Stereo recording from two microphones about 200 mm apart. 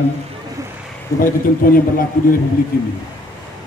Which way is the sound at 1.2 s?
45° left (ahead or behind).